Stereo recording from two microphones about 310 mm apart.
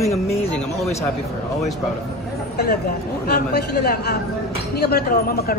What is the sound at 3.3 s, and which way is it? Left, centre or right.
A man's voice, left.